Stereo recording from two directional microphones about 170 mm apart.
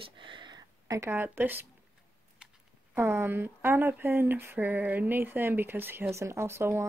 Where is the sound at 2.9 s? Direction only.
15° right (ahead or behind).